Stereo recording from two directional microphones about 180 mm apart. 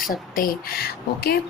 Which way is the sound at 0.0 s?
50° left (ahead or behind).